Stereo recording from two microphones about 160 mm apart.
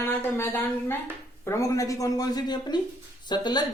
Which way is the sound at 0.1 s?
15° left (ahead or behind).